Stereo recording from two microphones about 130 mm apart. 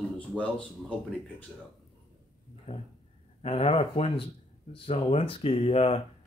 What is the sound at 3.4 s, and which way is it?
Speech, 50° left (ahead or behind).